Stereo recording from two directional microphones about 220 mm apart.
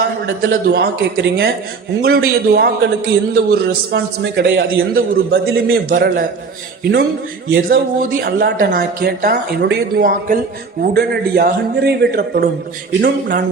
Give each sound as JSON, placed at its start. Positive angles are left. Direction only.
{"t": 0.0, "sound": "a man's voice", "side_deg": -40}
{"t": 7.5, "sound": "a man's voice", "side_deg": -45}